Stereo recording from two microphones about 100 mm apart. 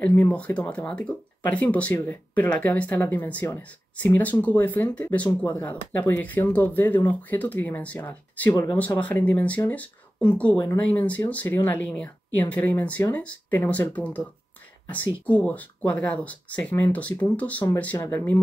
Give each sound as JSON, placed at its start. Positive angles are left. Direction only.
{"t": 0.0, "sound": "speech", "side_deg": 15}